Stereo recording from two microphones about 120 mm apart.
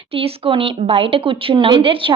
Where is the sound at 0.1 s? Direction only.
50° right (ahead or behind).